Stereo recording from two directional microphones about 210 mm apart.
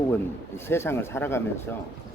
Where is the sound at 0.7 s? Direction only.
10° left (ahead or behind).